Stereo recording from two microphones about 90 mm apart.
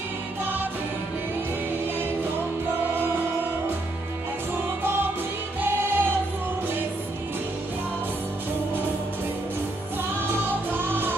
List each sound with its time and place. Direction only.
5.6 s music: 25° right (ahead or behind)
10.1 s music: 25° right (ahead or behind)